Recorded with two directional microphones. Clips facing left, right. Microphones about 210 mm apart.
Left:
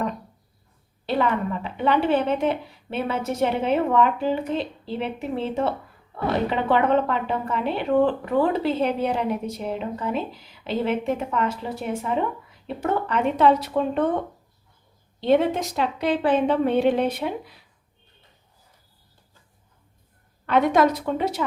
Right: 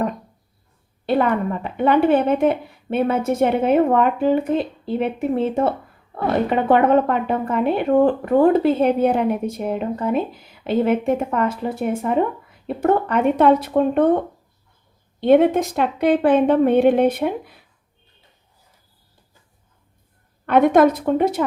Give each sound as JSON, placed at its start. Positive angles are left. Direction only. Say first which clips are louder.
{"t": 1.0, "sound": "speech", "louder": "right 4 dB", "side_deg": -50}
{"t": 15.2, "sound": "speech", "louder": "right 6 dB", "side_deg": -55}
{"t": 20.5, "sound": "speech", "louder": "right 5 dB", "side_deg": -50}